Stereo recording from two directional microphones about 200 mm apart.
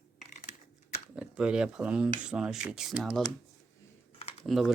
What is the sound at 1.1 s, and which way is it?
Speech, 5° right (ahead or behind).